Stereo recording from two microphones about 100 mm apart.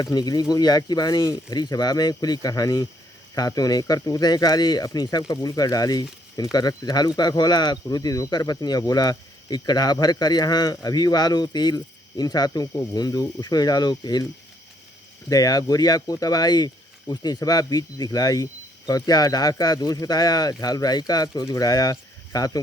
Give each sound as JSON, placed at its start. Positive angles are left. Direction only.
{"t": 0.0, "sound": "speech", "side_deg": 40}
{"t": 15.3, "sound": "speech", "side_deg": 40}